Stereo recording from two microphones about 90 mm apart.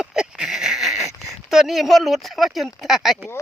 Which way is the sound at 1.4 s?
5° right (ahead or behind).